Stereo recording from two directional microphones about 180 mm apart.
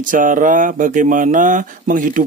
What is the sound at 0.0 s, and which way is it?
Speech, 45° right (ahead or behind).